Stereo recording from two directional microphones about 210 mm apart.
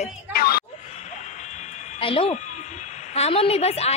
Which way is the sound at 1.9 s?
25° left (ahead or behind).